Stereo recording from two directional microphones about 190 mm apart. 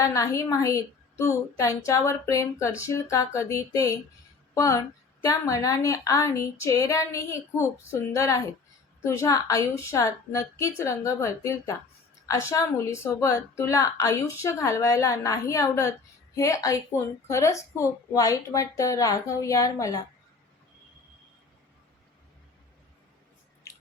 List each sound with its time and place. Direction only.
0.0 s a woman's voice: 15° left (ahead or behind)